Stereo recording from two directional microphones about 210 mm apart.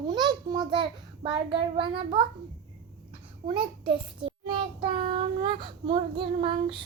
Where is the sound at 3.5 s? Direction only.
25° right (ahead or behind).